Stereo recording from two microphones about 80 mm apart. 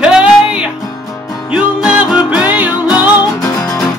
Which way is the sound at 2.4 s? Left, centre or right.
Centre.